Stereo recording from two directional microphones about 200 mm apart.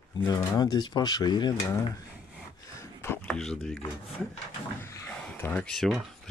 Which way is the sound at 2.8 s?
10° left (ahead or behind).